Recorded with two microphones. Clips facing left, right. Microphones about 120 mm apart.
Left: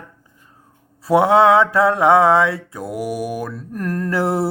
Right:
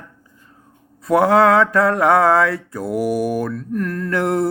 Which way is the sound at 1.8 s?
25° left (ahead or behind).